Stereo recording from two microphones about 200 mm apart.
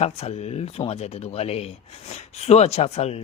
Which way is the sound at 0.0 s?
30° left (ahead or behind).